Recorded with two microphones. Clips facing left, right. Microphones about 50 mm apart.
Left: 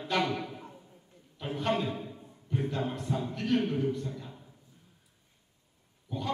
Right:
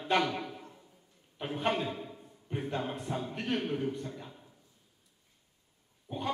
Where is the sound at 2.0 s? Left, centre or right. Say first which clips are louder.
Left 2 dB; centre.